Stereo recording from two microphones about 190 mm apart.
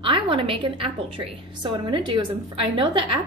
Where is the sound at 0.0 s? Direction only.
25° right (ahead or behind).